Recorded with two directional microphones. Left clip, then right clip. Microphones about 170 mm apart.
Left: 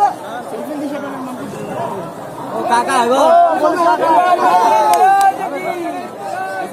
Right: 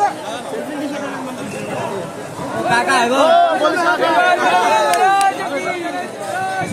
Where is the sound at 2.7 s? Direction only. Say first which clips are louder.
Left 2 dB; 55° left (ahead or behind).